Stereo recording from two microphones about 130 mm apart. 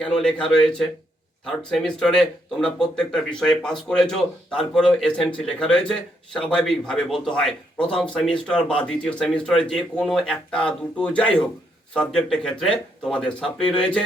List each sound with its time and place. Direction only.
0.0 s a man's voice: 5° left (ahead or behind)